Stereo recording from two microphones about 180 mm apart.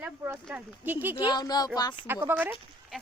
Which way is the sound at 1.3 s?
20° left (ahead or behind).